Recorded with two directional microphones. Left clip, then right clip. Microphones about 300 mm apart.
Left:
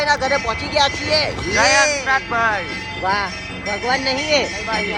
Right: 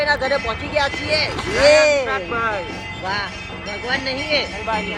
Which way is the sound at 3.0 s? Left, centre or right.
Left.